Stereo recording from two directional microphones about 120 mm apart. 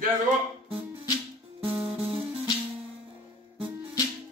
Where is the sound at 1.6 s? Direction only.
50° right (ahead or behind).